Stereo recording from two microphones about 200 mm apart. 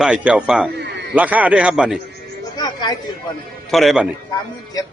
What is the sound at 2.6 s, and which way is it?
Chatter, 20° left (ahead or behind).